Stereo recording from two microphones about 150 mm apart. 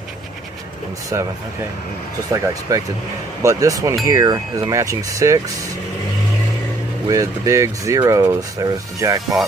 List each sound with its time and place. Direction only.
1.1 s speech: 20° right (ahead or behind)
2.3 s speech: 20° right (ahead or behind)
7.1 s speech: 20° right (ahead or behind)